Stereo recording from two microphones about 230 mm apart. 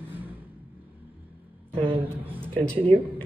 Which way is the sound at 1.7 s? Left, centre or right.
Right.